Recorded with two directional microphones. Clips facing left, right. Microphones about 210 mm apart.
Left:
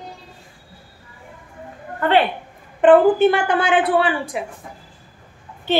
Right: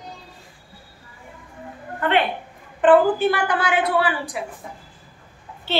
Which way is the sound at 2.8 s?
20° left (ahead or behind).